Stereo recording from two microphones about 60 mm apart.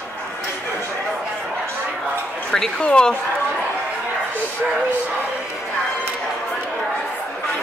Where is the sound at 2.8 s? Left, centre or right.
Centre.